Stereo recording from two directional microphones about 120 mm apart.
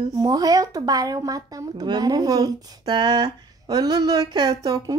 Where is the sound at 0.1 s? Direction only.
30° right (ahead or behind).